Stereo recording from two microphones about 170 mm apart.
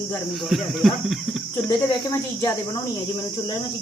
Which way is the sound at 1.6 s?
20° left (ahead or behind).